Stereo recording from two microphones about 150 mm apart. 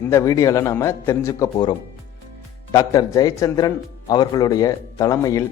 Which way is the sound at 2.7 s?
20° left (ahead or behind).